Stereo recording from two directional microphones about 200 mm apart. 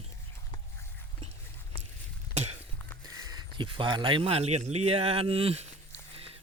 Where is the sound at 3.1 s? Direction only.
20° right (ahead or behind).